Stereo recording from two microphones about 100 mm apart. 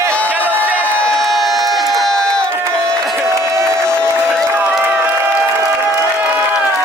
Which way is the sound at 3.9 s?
10° left (ahead or behind).